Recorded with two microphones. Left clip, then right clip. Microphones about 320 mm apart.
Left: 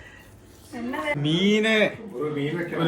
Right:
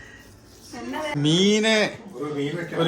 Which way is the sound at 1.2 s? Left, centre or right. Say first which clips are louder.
Right 4 dB; centre.